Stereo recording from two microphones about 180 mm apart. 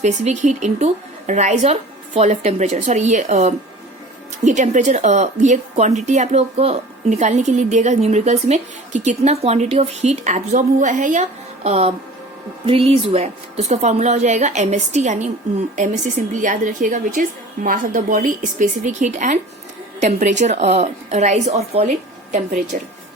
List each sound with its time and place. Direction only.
0.0 s a woman's voice: 40° right (ahead or behind)